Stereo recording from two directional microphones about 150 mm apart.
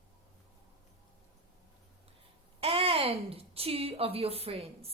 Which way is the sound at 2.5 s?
40° right (ahead or behind).